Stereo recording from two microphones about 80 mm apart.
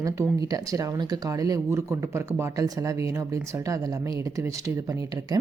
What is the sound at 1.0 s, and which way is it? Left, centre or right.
Speech, right.